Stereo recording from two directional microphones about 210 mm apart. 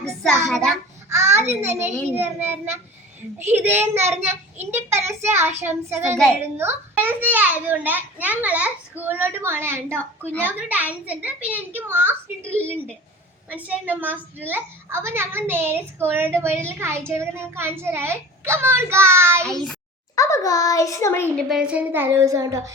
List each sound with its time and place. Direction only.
0.2 s a child's voice: centre (ahead or behind)
1.1 s a child's voice: 10° right (ahead or behind)
19.4 s a child's voice: centre (ahead or behind)
20.1 s a child's voice: 15° left (ahead or behind)
21.3 s a child's voice: 5° right (ahead or behind)